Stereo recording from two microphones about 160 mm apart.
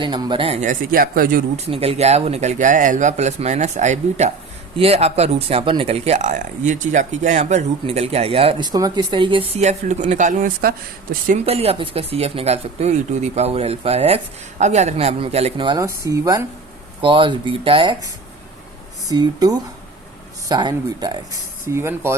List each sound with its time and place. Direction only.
0.0 s speech: 30° right (ahead or behind)
0.6 s speech: 60° right (ahead or behind)
1.5 s speech: 40° right (ahead or behind)
9.6 s speech: 45° right (ahead or behind)
10.6 s speech: 70° right (ahead or behind)
11.3 s speech: 40° right (ahead or behind)
15.6 s speech: 20° right (ahead or behind)
17.0 s speech: 30° right (ahead or behind)
19.0 s speech: 25° right (ahead or behind)
21.7 s speech: 15° right (ahead or behind)